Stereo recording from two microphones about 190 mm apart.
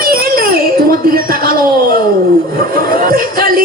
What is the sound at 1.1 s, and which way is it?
Speech, 50° right (ahead or behind).